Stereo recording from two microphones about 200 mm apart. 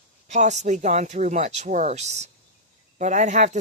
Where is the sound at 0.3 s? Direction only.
35° right (ahead or behind).